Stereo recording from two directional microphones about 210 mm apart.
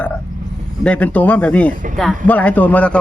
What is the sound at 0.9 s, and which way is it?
Speech, 5° left (ahead or behind).